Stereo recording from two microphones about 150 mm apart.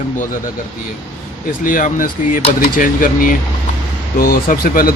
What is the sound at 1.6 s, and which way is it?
Speech, 60° left (ahead or behind).